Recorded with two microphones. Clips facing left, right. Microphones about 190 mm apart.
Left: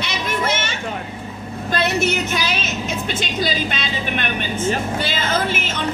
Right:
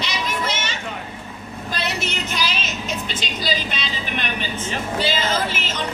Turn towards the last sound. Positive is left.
turn(degrees=55)  # may be behind; listen again after turning